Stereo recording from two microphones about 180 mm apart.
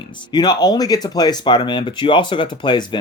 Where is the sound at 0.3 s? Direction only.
20° left (ahead or behind).